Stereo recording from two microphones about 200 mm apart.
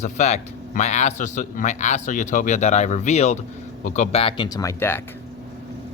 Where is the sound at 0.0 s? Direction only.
35° left (ahead or behind); by 5.0 s 10° left (ahead or behind).